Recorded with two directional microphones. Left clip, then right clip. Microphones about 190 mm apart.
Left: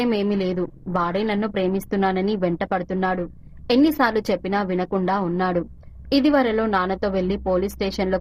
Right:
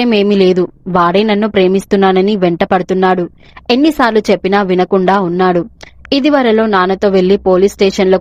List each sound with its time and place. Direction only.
0.0 s a woman's voice: 40° right (ahead or behind)